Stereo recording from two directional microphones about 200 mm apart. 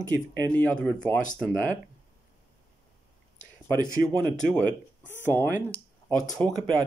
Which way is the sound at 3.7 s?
15° right (ahead or behind).